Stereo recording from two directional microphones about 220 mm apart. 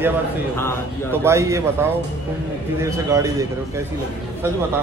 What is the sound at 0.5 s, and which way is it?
Speech, 10° left (ahead or behind).